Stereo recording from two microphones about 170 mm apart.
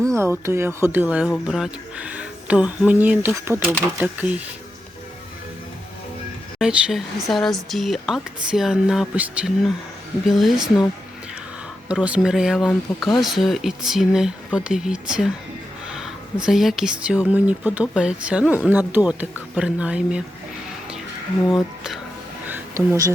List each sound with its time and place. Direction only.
0.2 s speech: 15° right (ahead or behind)
6.6 s speech: 5° right (ahead or behind)
11.9 s speech: 5° right (ahead or behind)
22.4 s a sound: 10° right (ahead or behind)
22.9 s speech: 20° right (ahead or behind)